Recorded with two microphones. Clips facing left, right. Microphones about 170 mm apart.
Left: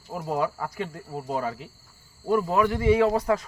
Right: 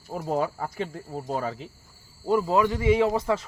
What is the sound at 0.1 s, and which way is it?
Speech, 40° right (ahead or behind).